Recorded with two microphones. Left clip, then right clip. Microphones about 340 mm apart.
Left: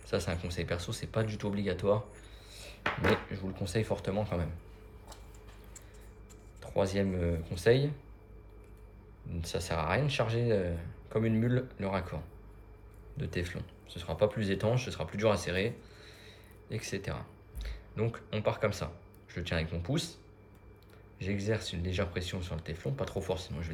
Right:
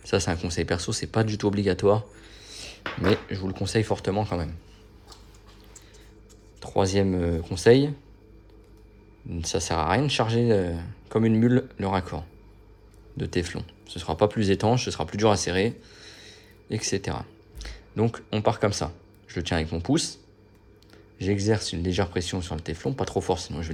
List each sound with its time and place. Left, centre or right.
0.0 s speech: centre
6.6 s speech: centre
9.4 s speech: centre
21.2 s speech: centre